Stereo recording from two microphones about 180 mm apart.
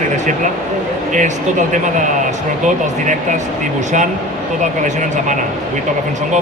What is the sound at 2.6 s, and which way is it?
Speech, 45° right (ahead or behind).